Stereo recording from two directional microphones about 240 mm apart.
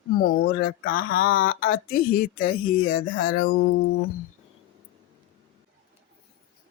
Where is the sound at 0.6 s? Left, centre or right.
Left.